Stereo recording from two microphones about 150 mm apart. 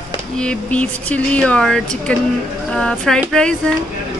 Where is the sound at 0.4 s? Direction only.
10° left (ahead or behind).